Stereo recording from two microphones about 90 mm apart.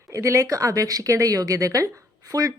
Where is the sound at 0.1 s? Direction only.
35° right (ahead or behind).